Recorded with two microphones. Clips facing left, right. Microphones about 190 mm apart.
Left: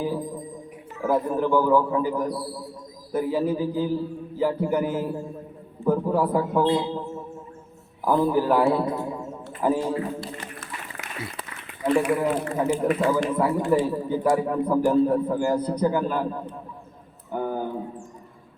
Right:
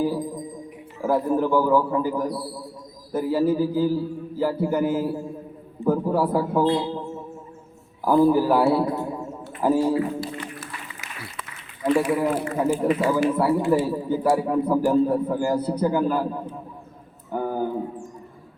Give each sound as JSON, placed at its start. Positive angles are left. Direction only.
{"t": 1.0, "sound": "a man's voice", "side_deg": -5}
{"t": 6.7, "sound": "a man's voice", "side_deg": 20}
{"t": 8.0, "sound": "a man's voice", "side_deg": -5}
{"t": 11.9, "sound": "a man's voice", "side_deg": -10}
{"t": 17.3, "sound": "a sound", "side_deg": -5}